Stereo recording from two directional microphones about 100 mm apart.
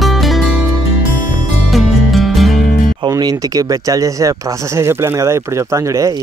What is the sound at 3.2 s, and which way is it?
Speech, 40° right (ahead or behind).